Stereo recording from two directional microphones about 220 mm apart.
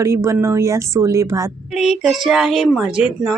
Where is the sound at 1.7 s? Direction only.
Centre (ahead or behind).